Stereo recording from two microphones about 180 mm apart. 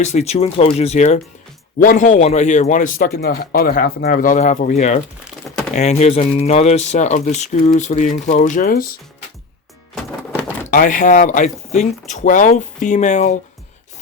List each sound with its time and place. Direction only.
0.0 s speech: 40° left (ahead or behind)
1.8 s a man's voice: 50° left (ahead or behind)
9.9 s a sound: 5° left (ahead or behind)
10.7 s a man's voice: 50° left (ahead or behind)